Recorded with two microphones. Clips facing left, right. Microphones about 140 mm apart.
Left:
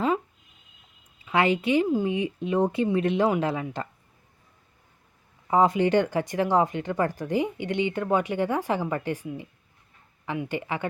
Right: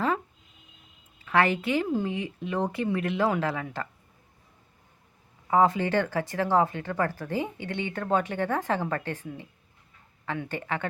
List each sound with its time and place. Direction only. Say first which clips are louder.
1.2 s speech: left 1 dB; 15° left (ahead or behind)
5.5 s speech: left 2 dB; 15° left (ahead or behind)